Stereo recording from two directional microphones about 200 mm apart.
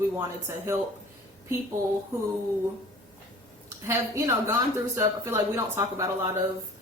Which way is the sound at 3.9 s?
10° right (ahead or behind).